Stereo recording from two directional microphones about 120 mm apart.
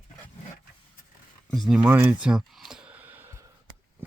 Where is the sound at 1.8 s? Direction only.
15° right (ahead or behind).